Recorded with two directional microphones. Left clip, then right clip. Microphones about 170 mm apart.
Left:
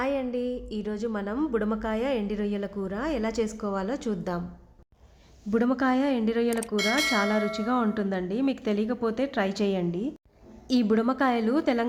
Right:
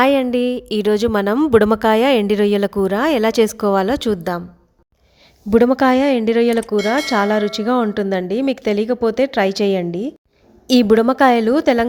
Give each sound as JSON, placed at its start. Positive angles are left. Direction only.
{"t": 0.0, "sound": "speech", "side_deg": -55}
{"t": 5.5, "sound": "speech", "side_deg": -45}
{"t": 6.7, "sound": "speech", "side_deg": 0}
{"t": 7.1, "sound": "speech", "side_deg": -45}